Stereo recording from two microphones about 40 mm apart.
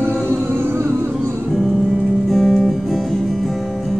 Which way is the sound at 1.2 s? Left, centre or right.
Right.